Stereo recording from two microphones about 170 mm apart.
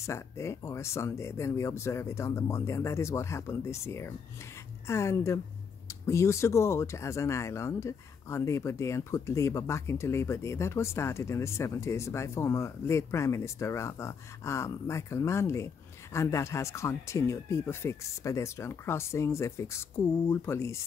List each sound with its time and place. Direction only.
0.0 s speech: 15° left (ahead or behind)